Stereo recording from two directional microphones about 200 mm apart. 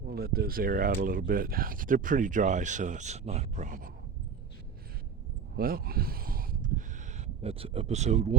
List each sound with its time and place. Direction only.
0.1 s speech: 50° right (ahead or behind)
5.5 s a sound: 50° right (ahead or behind)
7.4 s speech: 30° right (ahead or behind)